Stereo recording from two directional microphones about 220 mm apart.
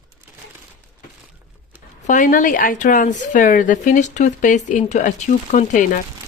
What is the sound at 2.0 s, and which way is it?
Speech, 35° left (ahead or behind).